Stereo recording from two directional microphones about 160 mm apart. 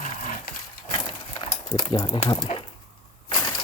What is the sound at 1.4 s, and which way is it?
Speech, 30° left (ahead or behind).